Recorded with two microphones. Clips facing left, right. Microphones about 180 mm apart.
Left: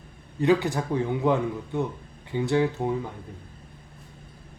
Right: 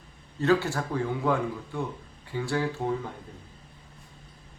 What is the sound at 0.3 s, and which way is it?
A man's voice, 15° left (ahead or behind).